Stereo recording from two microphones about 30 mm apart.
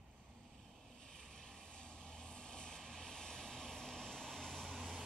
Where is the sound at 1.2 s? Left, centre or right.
Centre.